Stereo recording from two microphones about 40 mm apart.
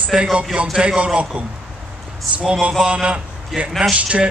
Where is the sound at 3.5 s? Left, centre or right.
Centre.